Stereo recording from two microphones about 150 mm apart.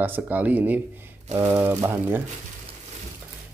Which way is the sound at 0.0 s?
10° right (ahead or behind).